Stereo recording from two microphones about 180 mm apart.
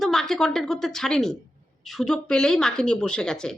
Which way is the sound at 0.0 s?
Centre (ahead or behind).